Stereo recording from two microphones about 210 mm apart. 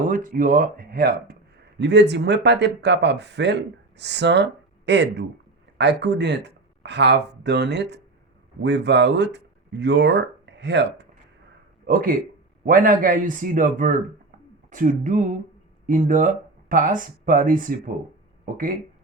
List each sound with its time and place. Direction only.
0.0 s speech: 40° right (ahead or behind); by 11.0 s 55° right (ahead or behind)
11.9 s speech: 40° right (ahead or behind)